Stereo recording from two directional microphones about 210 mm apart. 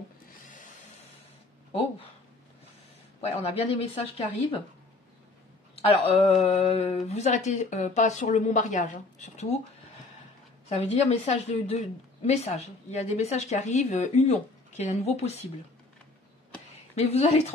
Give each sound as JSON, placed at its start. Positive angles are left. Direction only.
{"t": 0.5, "sound": "tools", "side_deg": 35}
{"t": 3.2, "sound": "speech", "side_deg": 30}
{"t": 5.8, "sound": "a woman's voice", "side_deg": 30}
{"t": 10.8, "sound": "a woman's voice", "side_deg": 30}
{"t": 16.9, "sound": "a woman's voice", "side_deg": 30}